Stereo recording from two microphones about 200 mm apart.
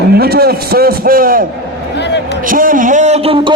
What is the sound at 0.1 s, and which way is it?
A man's voice, 50° right (ahead or behind).